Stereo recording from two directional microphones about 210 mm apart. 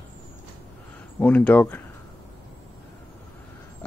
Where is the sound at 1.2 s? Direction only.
5° left (ahead or behind).